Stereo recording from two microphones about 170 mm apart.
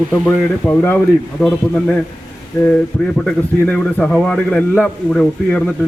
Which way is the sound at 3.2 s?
5° left (ahead or behind).